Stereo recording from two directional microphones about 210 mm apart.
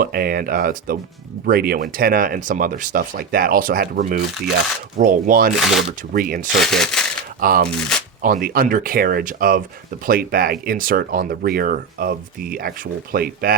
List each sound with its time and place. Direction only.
0.0 s speech: 45° right (ahead or behind)
5.5 s speech: centre (ahead or behind)
6.1 s speech: 45° right (ahead or behind)
6.6 s shuffling cards: centre (ahead or behind)
7.4 s speech: 45° right (ahead or behind)